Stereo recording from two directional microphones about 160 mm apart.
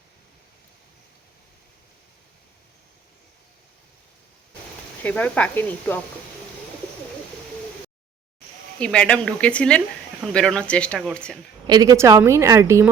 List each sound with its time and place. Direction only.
5.0 s speech: 10° left (ahead or behind)
8.8 s speech: 5° left (ahead or behind)
11.7 s a woman's voice: 25° right (ahead or behind)